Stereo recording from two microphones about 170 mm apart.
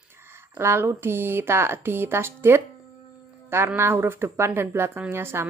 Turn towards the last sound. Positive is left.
turn(degrees=-15)  # may be behind; listen again after turning